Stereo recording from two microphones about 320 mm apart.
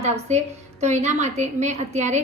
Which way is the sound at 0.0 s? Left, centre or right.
Right.